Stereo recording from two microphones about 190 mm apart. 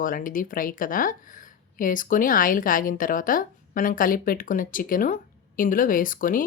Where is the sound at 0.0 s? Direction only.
45° left (ahead or behind).